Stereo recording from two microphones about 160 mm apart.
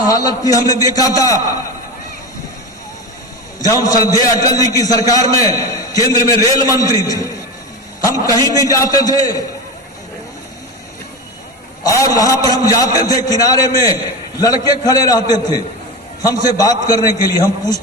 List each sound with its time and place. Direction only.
0.1 s a man's voice: 20° left (ahead or behind)
3.6 s a man's voice: 25° left (ahead or behind)
8.5 s a man's voice: 20° left (ahead or behind)
11.9 s a man's voice: 20° left (ahead or behind)